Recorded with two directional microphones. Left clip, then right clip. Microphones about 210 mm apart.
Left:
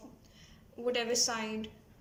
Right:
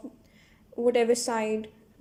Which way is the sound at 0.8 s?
35° right (ahead or behind).